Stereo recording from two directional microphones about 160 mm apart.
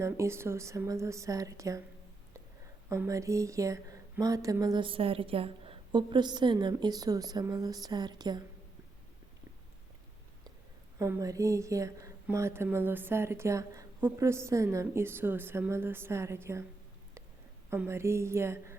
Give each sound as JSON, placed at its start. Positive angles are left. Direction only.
{"t": 0.0, "sound": "speech", "side_deg": -15}
{"t": 2.9, "sound": "speech", "side_deg": -20}
{"t": 10.9, "sound": "a woman's voice", "side_deg": -20}
{"t": 17.7, "sound": "a woman's voice", "side_deg": -15}